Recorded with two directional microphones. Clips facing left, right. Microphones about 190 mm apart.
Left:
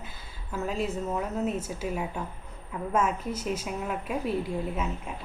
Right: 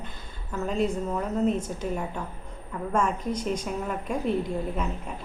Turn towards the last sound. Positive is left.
turn(degrees=5)  # may be behind; listen again after turning